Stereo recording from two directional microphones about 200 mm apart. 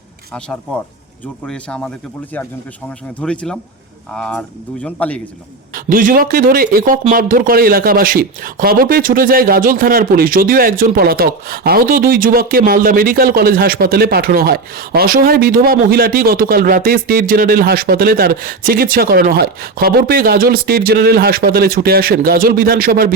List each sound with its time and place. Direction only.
1.5 s speech: 5° left (ahead or behind)
3.2 s speech: 5° left (ahead or behind)
5.7 s speech: 45° right (ahead or behind)